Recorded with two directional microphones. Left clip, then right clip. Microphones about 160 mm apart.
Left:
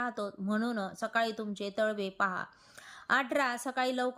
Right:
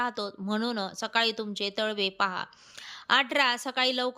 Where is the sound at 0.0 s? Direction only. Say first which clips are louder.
Right 4 dB; 10° right (ahead or behind).